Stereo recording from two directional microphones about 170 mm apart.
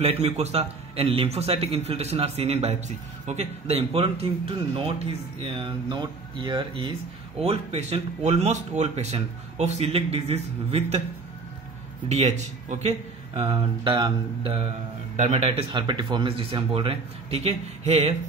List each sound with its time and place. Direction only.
0.0 s speech: 35° right (ahead or behind)
12.1 s speech: 40° right (ahead or behind)